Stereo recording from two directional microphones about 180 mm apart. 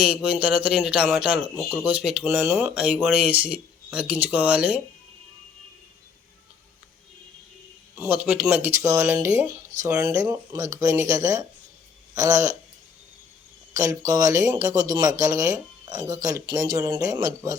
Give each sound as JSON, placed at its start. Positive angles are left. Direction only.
{"t": 0.0, "sound": "speech", "side_deg": -5}
{"t": 7.9, "sound": "speech", "side_deg": -10}
{"t": 12.1, "sound": "a sound", "side_deg": -20}
{"t": 13.7, "sound": "speech", "side_deg": -20}